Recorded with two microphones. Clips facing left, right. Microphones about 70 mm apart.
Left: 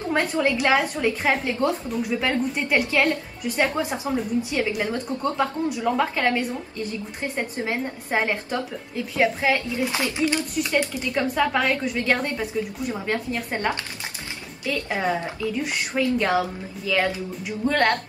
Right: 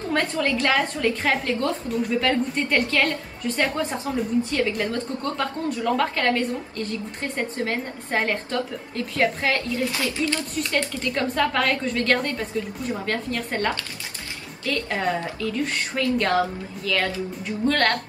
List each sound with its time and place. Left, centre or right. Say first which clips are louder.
0.1 s a woman's voice: left 1 dB; centre